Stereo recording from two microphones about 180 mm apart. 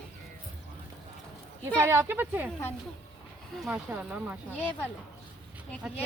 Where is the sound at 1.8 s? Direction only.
15° right (ahead or behind).